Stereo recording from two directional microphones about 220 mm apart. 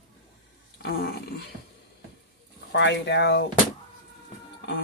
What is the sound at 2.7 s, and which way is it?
Speech, 50° left (ahead or behind).